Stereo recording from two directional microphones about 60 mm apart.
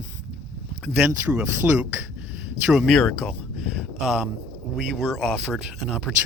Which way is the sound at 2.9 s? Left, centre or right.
Centre.